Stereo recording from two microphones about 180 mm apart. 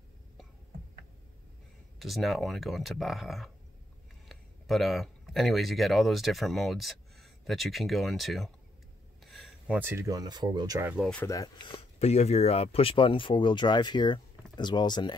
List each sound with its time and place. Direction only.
2.0 s speech: centre (ahead or behind)
9.2 s a sound: centre (ahead or behind)
9.8 s speech: 15° right (ahead or behind)
11.2 s speech: 20° left (ahead or behind)